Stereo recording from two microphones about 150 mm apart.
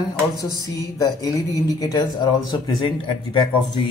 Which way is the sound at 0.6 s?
25° left (ahead or behind).